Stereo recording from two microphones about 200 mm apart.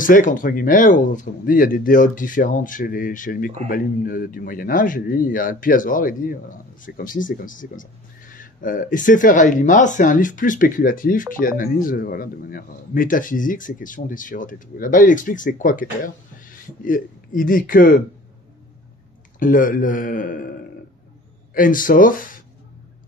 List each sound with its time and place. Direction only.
0.0 s speech: 40° left (ahead or behind)
19.4 s speech: 45° left (ahead or behind)
21.5 s speech: 45° left (ahead or behind)